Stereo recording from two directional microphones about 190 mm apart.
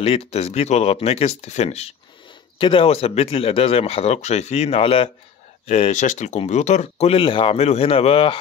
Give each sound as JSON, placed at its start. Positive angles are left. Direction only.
{"t": 0.0, "sound": "speech", "side_deg": 30}